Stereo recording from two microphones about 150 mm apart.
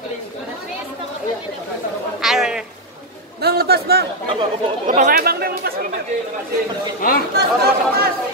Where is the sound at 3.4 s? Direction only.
90° right.